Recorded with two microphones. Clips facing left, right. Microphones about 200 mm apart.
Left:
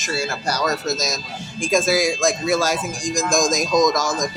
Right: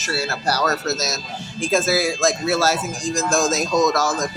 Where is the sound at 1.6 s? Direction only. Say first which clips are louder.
Left 1 dB; 15° left (ahead or behind).